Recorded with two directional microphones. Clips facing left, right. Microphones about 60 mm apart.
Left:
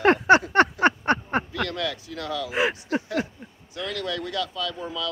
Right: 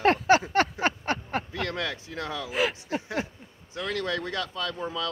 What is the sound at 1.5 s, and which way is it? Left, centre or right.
Speech, right.